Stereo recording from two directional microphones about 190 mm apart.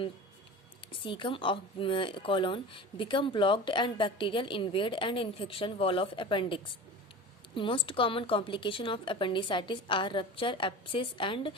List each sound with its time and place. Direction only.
0.9 s speech: 25° left (ahead or behind)